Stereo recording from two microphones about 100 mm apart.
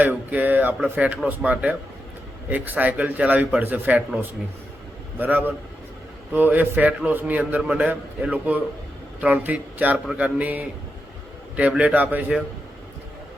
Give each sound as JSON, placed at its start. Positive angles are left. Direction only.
{"t": 0.0, "sound": "a man's voice", "side_deg": -15}
{"t": 2.5, "sound": "a man's voice", "side_deg": -20}
{"t": 5.1, "sound": "a man's voice", "side_deg": -20}